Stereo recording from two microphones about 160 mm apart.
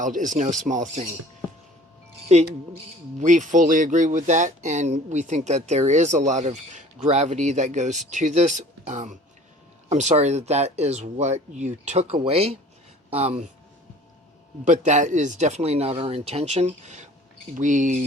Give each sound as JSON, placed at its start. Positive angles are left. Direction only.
{"t": 0.0, "sound": "speech", "side_deg": -55}
{"t": 2.3, "sound": "speech", "side_deg": -45}
{"t": 14.7, "sound": "speech", "side_deg": -50}